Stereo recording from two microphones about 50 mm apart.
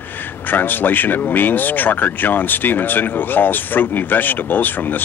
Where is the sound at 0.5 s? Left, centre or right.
Left.